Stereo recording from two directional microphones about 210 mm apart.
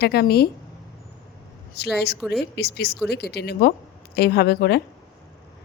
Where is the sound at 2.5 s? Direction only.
50° left (ahead or behind).